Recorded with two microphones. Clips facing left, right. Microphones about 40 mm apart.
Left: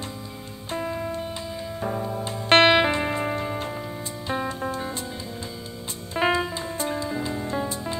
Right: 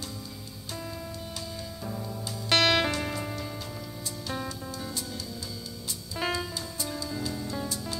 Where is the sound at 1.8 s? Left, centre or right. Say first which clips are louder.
Left 10 dB; left.